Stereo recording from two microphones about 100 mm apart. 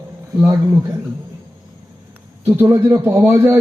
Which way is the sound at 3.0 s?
20° right (ahead or behind).